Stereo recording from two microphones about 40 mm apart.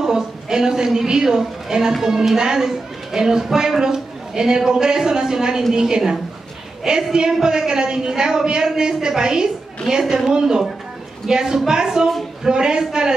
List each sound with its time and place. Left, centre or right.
0.0 s a woman's voice: centre